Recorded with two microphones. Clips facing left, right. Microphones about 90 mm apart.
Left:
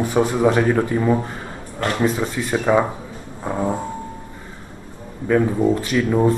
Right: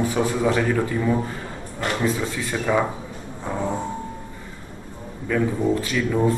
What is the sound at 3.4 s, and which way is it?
Music, 10° left (ahead or behind).